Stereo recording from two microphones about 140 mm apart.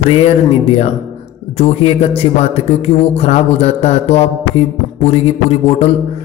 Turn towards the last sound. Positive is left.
turn(degrees=45)  # may be behind; listen again after turning